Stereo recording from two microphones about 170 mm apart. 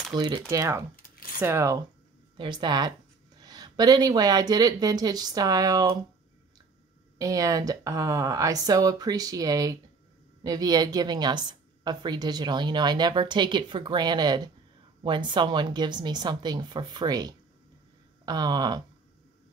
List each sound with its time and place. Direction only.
0.1 s a woman's voice: 25° right (ahead or behind)
0.9 s a sound: 55° left (ahead or behind)
1.4 s a woman's voice: 15° right (ahead or behind)
7.2 s a woman's voice: 20° right (ahead or behind)